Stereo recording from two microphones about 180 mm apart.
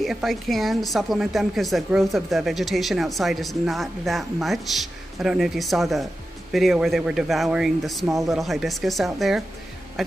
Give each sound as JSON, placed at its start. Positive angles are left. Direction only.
{"t": 0.0, "sound": "a woman's voice", "side_deg": 0}